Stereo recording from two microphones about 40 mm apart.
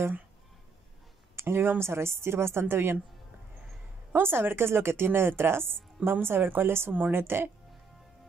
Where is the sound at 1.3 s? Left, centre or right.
Right.